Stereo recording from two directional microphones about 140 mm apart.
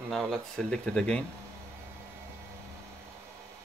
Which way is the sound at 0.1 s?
Centre (ahead or behind).